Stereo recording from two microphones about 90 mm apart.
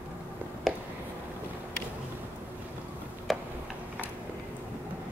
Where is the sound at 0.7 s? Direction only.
Centre (ahead or behind).